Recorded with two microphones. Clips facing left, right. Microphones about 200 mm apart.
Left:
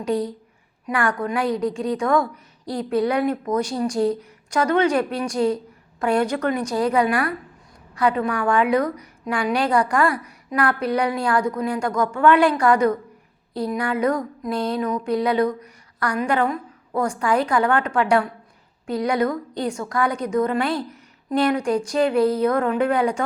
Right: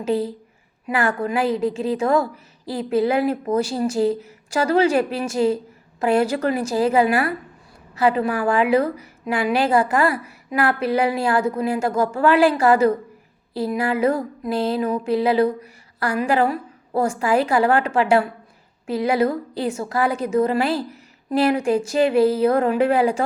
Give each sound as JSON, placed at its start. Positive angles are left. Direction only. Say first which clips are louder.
{"t": 0.0, "sound": "a woman's voice", "louder": "right 1 dB", "side_deg": -5}
{"t": 3.2, "sound": "speech", "louder": "right 1 dB", "side_deg": -30}
{"t": 3.6, "sound": "a woman's voice", "louder": "right 1 dB", "side_deg": -5}
{"t": 8.2, "sound": "a woman's voice", "louder": "right 1 dB", "side_deg": -5}